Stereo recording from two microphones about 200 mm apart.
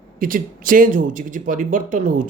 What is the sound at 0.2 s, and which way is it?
Speech, 45° right (ahead or behind).